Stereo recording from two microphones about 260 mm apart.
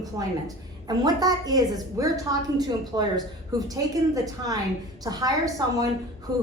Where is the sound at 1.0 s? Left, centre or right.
Centre.